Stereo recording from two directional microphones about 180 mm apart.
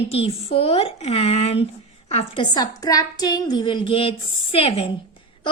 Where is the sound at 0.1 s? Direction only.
35° left (ahead or behind).